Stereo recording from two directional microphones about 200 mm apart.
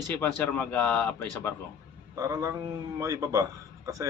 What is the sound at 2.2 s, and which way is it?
A man's voice, 15° right (ahead or behind).